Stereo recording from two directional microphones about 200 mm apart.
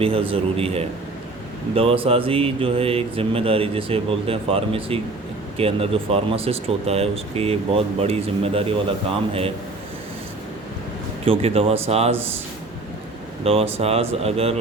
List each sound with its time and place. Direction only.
0.0 s speech: 30° right (ahead or behind)
11.3 s speech: 30° right (ahead or behind)
13.4 s speech: 30° right (ahead or behind)